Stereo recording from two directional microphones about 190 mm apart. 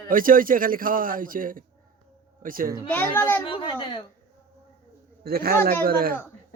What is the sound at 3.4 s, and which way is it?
Speech, 25° left (ahead or behind).